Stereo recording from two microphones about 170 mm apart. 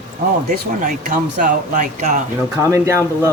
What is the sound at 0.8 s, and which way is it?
A woman's voice, 50° right (ahead or behind).